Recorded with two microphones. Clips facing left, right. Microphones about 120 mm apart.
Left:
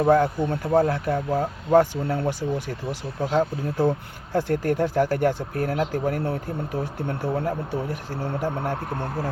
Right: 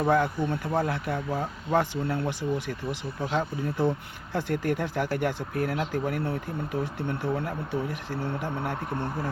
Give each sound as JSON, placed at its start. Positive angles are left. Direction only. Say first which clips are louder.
{"t": 0.1, "sound": "speech", "louder": "left 5 dB", "side_deg": 40}